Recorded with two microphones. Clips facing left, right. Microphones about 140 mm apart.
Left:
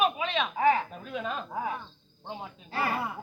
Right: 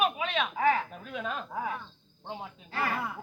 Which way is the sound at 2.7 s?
35° left (ahead or behind).